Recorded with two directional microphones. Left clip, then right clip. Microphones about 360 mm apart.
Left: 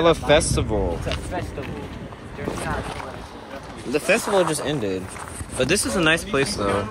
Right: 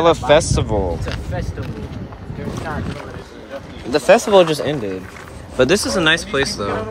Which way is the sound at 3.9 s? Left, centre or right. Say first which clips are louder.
Right 8 dB; right.